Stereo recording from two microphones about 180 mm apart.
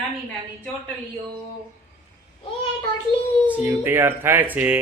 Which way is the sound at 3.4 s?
10° right (ahead or behind).